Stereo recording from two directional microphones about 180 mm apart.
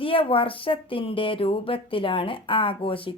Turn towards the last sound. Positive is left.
turn(degrees=30)  # may be behind; listen again after turning